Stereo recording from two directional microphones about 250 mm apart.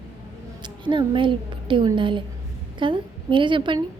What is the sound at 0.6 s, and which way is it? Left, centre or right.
A woman's voice, centre.